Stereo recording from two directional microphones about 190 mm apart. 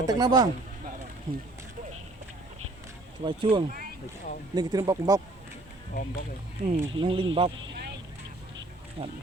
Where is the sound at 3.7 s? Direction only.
50° right (ahead or behind).